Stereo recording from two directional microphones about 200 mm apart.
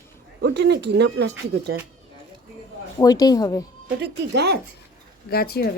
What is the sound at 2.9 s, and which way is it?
Speech, 20° left (ahead or behind).